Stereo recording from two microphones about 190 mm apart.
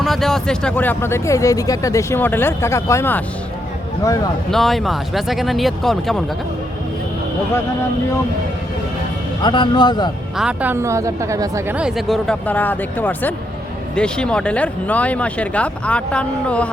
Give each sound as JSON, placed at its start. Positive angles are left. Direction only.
{"t": 0.0, "sound": "speech", "side_deg": 0}
{"t": 4.5, "sound": "speech", "side_deg": 0}
{"t": 9.4, "sound": "speech", "side_deg": 25}
{"t": 10.3, "sound": "a woman's voice", "side_deg": -5}
{"t": 11.8, "sound": "speech", "side_deg": 0}